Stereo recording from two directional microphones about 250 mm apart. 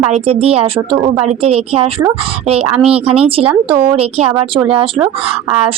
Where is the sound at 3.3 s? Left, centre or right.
Right.